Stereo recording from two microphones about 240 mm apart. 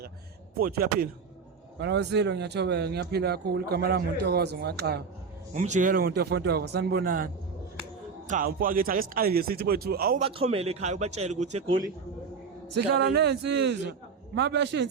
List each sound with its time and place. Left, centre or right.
0.5 s a man's voice: right
5.5 s speech: right
8.3 s speech: right
10.2 s a man's voice: right
13.0 s a man's voice: right